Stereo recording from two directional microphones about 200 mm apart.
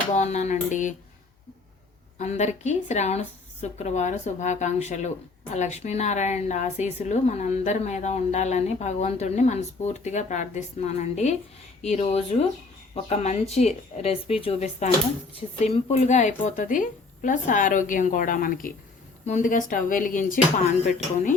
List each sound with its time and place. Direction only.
0.1 s a woman's voice: 35° left (ahead or behind)
2.1 s a woman's voice: 35° left (ahead or behind)